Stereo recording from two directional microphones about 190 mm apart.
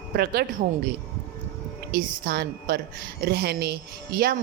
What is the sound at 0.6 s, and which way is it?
Speech, 50° right (ahead or behind).